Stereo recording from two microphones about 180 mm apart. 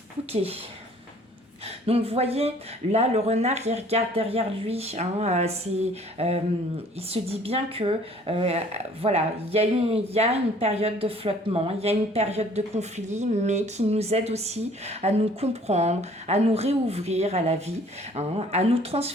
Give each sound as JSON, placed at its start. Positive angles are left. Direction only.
{"t": 1.6, "sound": "speech", "side_deg": -35}